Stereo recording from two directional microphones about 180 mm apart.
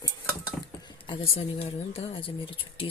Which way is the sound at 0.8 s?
25° left (ahead or behind).